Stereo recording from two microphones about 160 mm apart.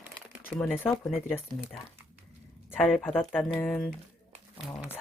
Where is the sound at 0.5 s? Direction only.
10° left (ahead or behind).